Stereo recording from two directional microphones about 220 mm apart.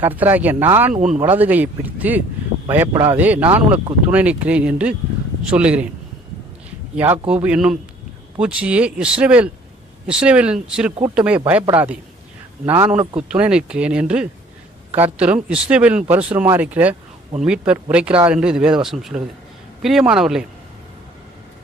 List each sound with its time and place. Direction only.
0.0 s speech: 10° right (ahead or behind)
0.9 s speech: 30° right (ahead or behind)
1.4 s speech: 5° right (ahead or behind)
6.9 s speech: 5° right (ahead or behind)